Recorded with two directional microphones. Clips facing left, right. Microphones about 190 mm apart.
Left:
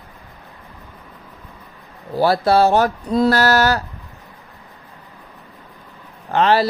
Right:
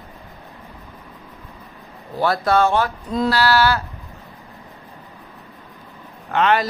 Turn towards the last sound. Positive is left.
turn(degrees=35)  # may be behind; listen again after turning